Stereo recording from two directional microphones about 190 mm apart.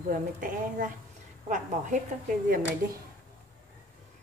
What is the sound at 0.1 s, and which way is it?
A woman's voice, 45° right (ahead or behind).